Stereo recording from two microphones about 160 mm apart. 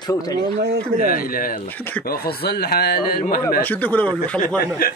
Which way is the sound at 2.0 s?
70° left (ahead or behind).